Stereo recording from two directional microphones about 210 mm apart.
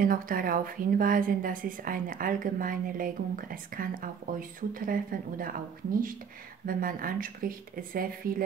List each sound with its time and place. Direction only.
0.0 s a woman's voice: 40° right (ahead or behind)
6.6 s speech: 40° right (ahead or behind)